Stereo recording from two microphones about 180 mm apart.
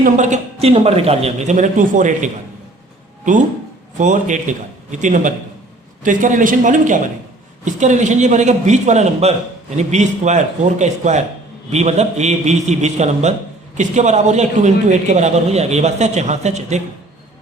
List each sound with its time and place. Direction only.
0.0 s a man's voice: 40° right (ahead or behind)
3.9 s a man's voice: 45° right (ahead or behind)